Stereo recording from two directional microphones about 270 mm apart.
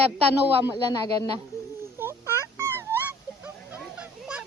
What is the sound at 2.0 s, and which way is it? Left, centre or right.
Dog, centre.